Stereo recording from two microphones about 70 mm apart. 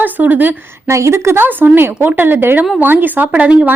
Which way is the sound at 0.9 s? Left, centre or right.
Right.